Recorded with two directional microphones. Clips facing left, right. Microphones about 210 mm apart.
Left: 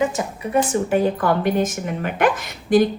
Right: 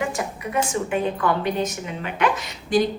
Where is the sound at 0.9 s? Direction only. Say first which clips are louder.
Left 4 dB; 45° left (ahead or behind).